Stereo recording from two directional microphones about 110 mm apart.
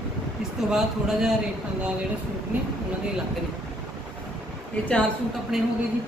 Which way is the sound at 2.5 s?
15° right (ahead or behind).